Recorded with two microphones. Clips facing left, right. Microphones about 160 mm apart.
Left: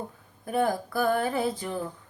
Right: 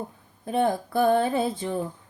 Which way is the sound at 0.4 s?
25° right (ahead or behind).